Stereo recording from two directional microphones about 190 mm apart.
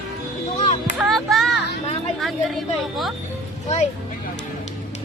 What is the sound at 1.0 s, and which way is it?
Music, centre (ahead or behind).